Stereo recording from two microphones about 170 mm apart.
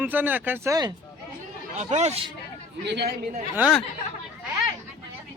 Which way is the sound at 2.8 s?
80° right.